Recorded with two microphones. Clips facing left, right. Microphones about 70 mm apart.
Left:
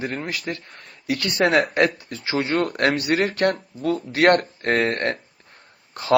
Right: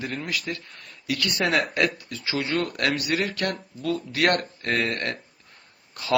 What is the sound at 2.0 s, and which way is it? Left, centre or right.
A man's voice, left.